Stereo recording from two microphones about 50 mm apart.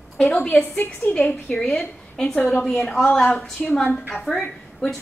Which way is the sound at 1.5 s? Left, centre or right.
Centre.